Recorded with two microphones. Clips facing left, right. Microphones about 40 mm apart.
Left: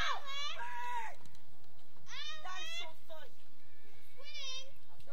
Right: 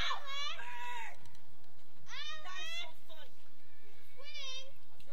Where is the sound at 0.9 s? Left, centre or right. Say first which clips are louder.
Left 3 dB; centre.